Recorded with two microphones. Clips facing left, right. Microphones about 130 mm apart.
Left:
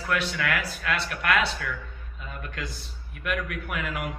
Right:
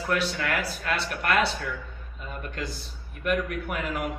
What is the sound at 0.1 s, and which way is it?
Speech, 40° right (ahead or behind).